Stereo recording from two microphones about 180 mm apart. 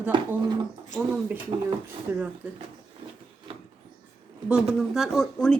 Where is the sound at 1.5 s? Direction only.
25° right (ahead or behind).